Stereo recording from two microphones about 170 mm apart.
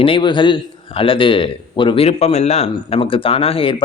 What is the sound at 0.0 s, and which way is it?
Speech, 30° left (ahead or behind).